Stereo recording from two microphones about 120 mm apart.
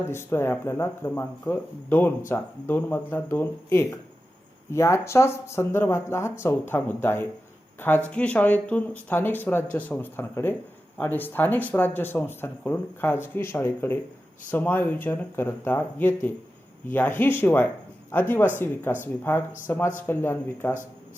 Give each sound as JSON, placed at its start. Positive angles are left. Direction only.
{"t": 0.0, "sound": "speech", "side_deg": 20}